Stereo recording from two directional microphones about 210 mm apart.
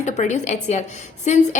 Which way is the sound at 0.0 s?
35° left (ahead or behind).